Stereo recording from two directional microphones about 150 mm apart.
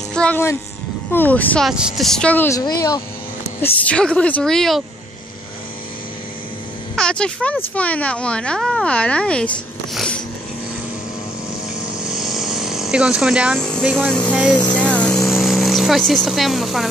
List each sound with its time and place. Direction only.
0.1 s speech: 10° left (ahead or behind)
1.7 s a woman's voice: centre (ahead or behind)
2.6 s speech: 25° left (ahead or behind)
3.6 s speech: 10° left (ahead or behind)
7.0 s speech: 5° left (ahead or behind)
9.9 s a sound: 5° left (ahead or behind)
12.0 s a sound: 5° right (ahead or behind)
13.9 s a woman's voice: 5° left (ahead or behind)